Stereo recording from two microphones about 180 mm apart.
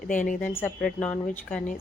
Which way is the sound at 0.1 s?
45° left (ahead or behind).